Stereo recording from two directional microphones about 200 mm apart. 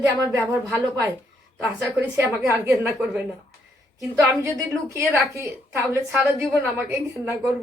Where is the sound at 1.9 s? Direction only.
10° right (ahead or behind).